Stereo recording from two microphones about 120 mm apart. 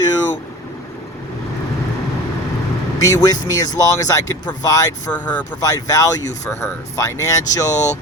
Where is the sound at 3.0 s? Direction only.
30° left (ahead or behind).